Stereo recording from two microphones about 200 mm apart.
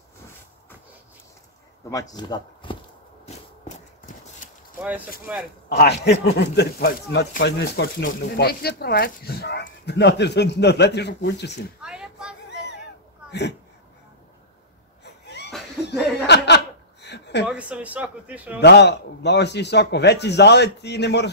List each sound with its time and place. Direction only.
1.9 s speech: 15° left (ahead or behind)
5.2 s speech: centre (ahead or behind)
5.7 s a man's voice: 55° left (ahead or behind)
11.8 s a sound: 5° right (ahead or behind)
15.2 s laughter: 55° left (ahead or behind)
16.3 s chuckle: 60° left (ahead or behind)
17.5 s a man's voice: 5° right (ahead or behind)
18.6 s speech: 55° left (ahead or behind)